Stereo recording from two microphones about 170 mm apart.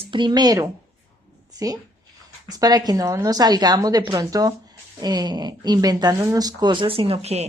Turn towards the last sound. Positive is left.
turn(degrees=-40)  # may be behind; listen again after turning